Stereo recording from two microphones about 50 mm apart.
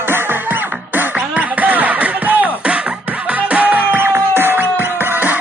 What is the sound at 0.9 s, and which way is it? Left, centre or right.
Music, right.